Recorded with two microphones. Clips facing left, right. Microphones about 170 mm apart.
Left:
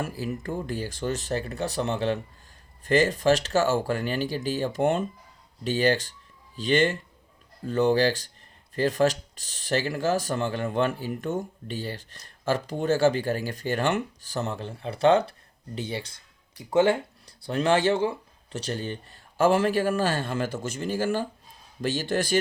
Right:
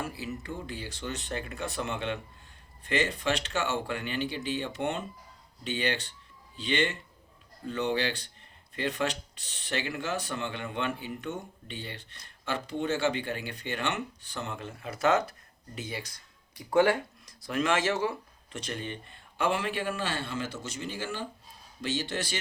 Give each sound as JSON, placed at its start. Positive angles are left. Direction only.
{"t": 0.0, "sound": "a man's voice", "side_deg": 45}